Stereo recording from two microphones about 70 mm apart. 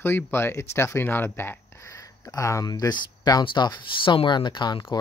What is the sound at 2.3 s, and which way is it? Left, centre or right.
Speech, left.